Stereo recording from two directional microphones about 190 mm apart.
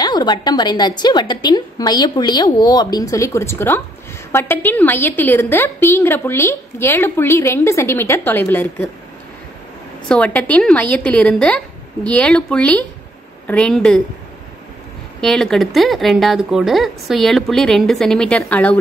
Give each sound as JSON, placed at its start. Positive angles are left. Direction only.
{"t": 0.0, "sound": "a woman's voice", "side_deg": 20}
{"t": 10.0, "sound": "speech", "side_deg": 5}
{"t": 15.1, "sound": "speech", "side_deg": 5}